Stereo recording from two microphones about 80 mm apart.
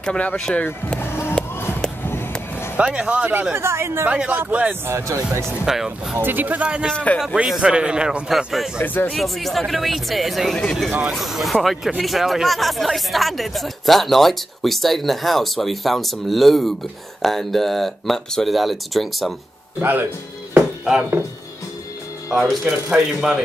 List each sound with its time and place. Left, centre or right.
0.0 s speech: centre
0.9 s music: left
2.0 s a sound: left
2.8 s a man's voice: centre
3.5 s a woman's voice: right
4.1 s a man's voice: centre
4.8 s a woman's voice: right
5.7 s speech: centre
6.1 s a man's voice: right; by 8.8 s centre
8.8 s speech: left
9.1 s speech: centre
19.8 s speech: right
22.3 s speech: centre